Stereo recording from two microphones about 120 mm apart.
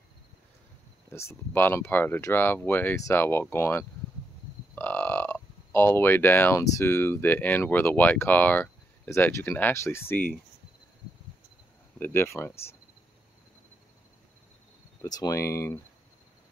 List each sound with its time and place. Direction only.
1.1 s speech: 20° left (ahead or behind)
4.7 s crow: 15° left (ahead or behind)
6.6 s speech: 20° left (ahead or behind)
12.0 s speech: 20° left (ahead or behind)
15.0 s speech: 30° left (ahead or behind)